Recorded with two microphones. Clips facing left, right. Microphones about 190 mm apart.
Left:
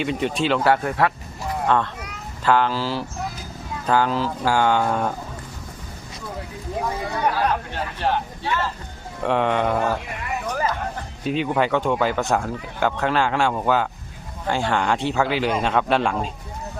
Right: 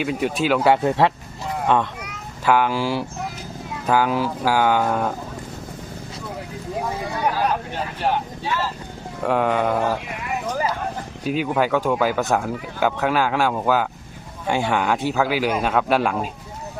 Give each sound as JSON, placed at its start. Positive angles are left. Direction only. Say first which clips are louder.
{"t": 0.0, "sound": "a man's voice", "louder": "right 1 dB", "side_deg": -5}
{"t": 0.6, "sound": "a child's voice", "louder": "right 4 dB", "side_deg": -20}
{"t": 7.3, "sound": "speech", "louder": "even", "side_deg": -15}
{"t": 9.2, "sound": "a man's voice", "louder": "right 1 dB", "side_deg": -5}
{"t": 10.4, "sound": "a sound", "louder": "even", "side_deg": -10}
{"t": 11.2, "sound": "a man's voice", "louder": "even", "side_deg": -5}